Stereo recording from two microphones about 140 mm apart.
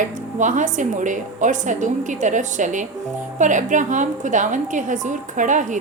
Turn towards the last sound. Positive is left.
turn(degrees=-65)  # may be behind; listen again after turning